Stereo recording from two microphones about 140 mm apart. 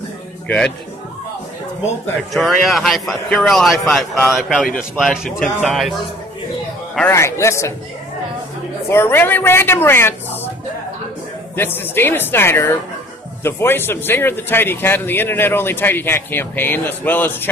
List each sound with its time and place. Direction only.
2.3 s a man's voice: centre (ahead or behind)
7.1 s a man's voice: 20° left (ahead or behind)
8.8 s a man's voice: 15° left (ahead or behind)
11.5 s a man's voice: 15° left (ahead or behind)